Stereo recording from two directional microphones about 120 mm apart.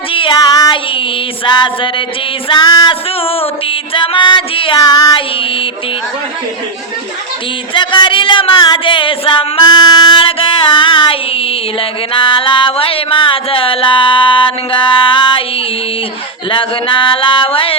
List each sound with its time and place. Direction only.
0.1 s child singing: 45° left (ahead or behind)
0.3 s child singing: 35° left (ahead or behind)
1.5 s a sound: 40° left (ahead or behind)
2.5 s music: 35° left (ahead or behind)
3.2 s music: 55° left (ahead or behind); by 5.2 s 35° left (ahead or behind)
7.7 s a sound: 40° left (ahead or behind)
16.5 s speech: 45° left (ahead or behind)